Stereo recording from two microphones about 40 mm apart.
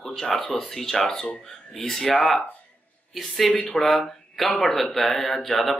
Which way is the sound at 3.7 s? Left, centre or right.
Centre.